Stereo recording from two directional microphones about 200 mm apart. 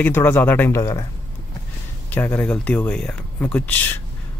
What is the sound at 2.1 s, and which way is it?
Speech, 10° left (ahead or behind).